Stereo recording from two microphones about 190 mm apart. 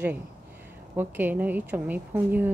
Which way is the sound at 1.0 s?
10° right (ahead or behind).